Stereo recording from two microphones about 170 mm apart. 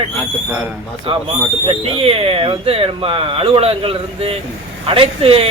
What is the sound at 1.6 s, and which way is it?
Speech, 35° right (ahead or behind).